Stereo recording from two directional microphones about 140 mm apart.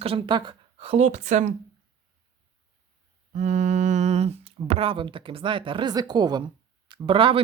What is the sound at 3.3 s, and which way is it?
Speech, 65° right (ahead or behind).